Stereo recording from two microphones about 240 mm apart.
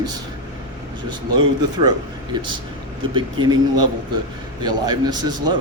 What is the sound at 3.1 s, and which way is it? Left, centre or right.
Speech, centre.